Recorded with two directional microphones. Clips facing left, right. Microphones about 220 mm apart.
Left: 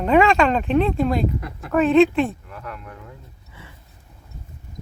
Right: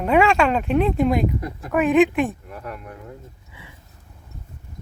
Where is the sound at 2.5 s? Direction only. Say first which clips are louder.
Right 2 dB; 40° right (ahead or behind).